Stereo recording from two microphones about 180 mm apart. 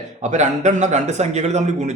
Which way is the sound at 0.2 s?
40° right (ahead or behind).